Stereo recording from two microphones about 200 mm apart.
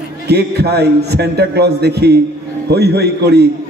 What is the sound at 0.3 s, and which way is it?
A man's voice, 55° right (ahead or behind).